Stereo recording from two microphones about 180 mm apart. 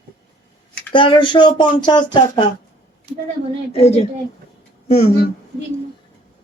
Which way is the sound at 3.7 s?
35° left (ahead or behind).